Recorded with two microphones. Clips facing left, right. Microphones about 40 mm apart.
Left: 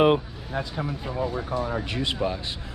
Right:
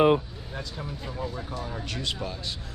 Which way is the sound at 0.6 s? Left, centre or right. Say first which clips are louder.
Left 7 dB; left.